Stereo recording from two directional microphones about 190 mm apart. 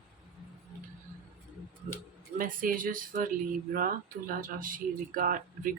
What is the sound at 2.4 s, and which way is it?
Speech, 45° right (ahead or behind).